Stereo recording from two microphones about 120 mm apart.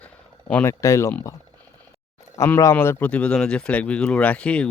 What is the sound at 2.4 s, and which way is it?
Speech, 25° left (ahead or behind).